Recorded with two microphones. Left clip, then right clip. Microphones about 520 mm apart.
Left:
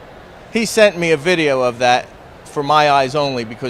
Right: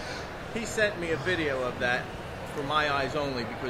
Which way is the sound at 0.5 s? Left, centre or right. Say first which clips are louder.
Left 16 dB; left.